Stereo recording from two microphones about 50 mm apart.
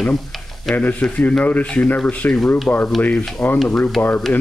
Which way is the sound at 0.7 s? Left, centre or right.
Centre.